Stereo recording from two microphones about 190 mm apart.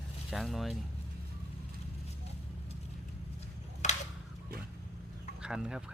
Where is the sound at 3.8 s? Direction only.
40° left (ahead or behind).